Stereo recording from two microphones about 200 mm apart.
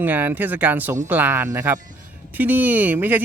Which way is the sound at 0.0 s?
10° right (ahead or behind).